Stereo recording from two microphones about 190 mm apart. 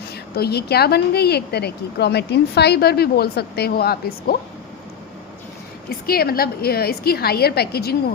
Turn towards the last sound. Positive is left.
turn(degrees=55)  # may be behind; listen again after turning